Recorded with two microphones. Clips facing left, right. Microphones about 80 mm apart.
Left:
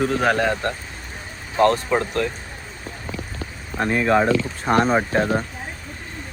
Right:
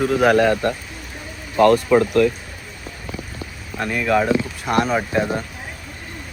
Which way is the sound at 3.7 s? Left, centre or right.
Left.